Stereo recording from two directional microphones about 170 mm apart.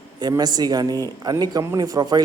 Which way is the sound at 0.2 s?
25° right (ahead or behind).